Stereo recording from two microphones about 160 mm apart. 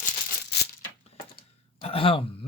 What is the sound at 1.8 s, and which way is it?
Speech, 35° left (ahead or behind).